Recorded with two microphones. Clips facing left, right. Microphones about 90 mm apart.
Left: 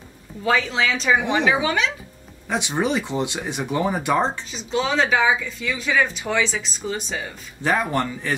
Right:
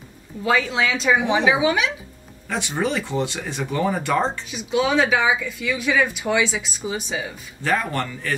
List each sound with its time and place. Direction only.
0.4 s speech: 5° right (ahead or behind)
1.2 s speech: 15° right (ahead or behind)
2.4 s speech: 15° left (ahead or behind)
4.5 s speech: 5° right (ahead or behind)
7.6 s speech: 15° left (ahead or behind)